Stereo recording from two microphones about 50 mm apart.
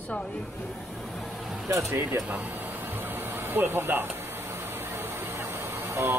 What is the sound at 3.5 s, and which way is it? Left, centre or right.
Speech, right.